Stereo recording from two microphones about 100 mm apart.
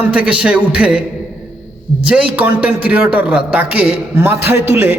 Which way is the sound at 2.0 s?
10° right (ahead or behind).